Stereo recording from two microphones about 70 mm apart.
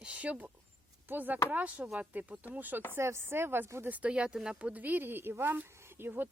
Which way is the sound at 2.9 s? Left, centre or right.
Right.